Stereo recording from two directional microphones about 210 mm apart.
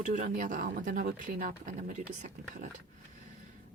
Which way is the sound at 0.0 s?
40° right (ahead or behind).